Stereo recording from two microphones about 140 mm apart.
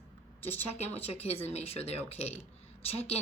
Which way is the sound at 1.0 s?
45° left (ahead or behind).